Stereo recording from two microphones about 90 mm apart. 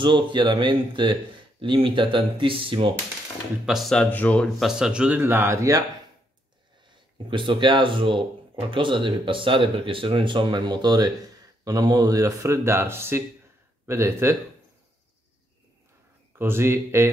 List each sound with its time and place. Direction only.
0.0 s speech: 60° right (ahead or behind)
1.6 s speech: 75° right (ahead or behind)
3.6 s speech: 5° right (ahead or behind)
3.9 s speech: 15° left (ahead or behind)
4.6 s speech: 5° right (ahead or behind)
5.2 s speech: 25° right (ahead or behind)
6.9 s speech: 65° right (ahead or behind); by 14.3 s 30° right (ahead or behind)
16.3 s speech: 25° right (ahead or behind)